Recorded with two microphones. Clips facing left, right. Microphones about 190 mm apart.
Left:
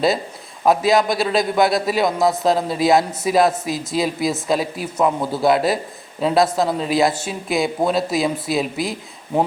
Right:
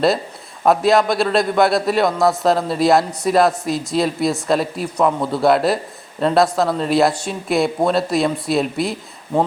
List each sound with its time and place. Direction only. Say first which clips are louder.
0.6 s speech: right 1 dB; centre (ahead or behind)